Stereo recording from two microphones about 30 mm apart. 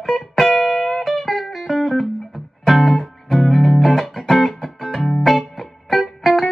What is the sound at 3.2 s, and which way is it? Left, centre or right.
Music, centre.